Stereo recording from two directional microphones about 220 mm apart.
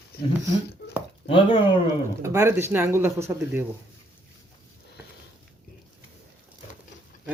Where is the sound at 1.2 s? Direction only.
25° left (ahead or behind).